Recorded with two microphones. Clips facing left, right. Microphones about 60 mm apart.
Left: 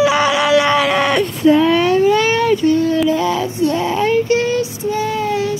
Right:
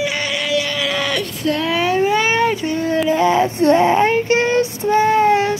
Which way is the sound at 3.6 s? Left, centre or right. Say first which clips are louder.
Right 4 dB; right.